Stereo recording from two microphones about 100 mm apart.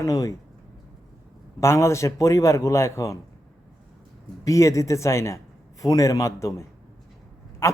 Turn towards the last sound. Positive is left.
turn(degrees=25)  # may be behind; listen again after turning